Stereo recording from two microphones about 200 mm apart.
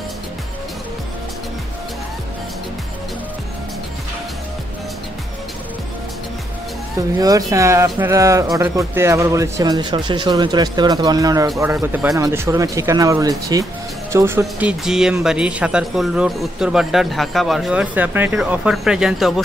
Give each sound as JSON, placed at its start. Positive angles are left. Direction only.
{"t": 7.2, "sound": "speech", "side_deg": -15}